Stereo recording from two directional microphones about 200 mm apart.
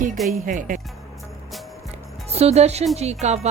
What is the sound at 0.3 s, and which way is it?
Speech, 40° right (ahead or behind).